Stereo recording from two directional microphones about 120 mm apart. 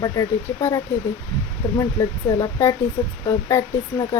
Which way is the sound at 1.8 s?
25° left (ahead or behind).